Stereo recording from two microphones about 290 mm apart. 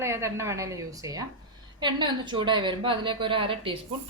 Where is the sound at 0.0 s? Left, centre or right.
Centre.